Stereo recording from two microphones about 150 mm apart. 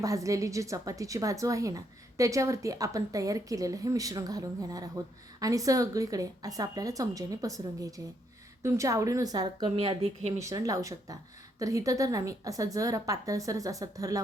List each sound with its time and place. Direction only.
0.0 s a woman's voice: 20° right (ahead or behind)